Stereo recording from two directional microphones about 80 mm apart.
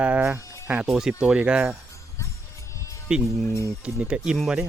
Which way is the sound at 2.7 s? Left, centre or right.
Left.